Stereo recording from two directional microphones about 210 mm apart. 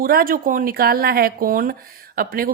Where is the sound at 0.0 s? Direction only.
45° right (ahead or behind).